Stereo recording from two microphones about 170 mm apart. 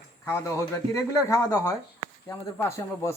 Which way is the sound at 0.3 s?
15° left (ahead or behind).